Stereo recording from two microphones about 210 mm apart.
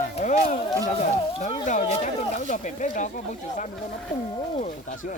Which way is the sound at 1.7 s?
35° left (ahead or behind).